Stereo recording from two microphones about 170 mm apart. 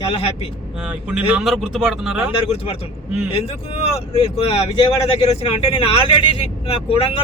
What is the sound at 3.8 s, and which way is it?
Speech, 35° left (ahead or behind).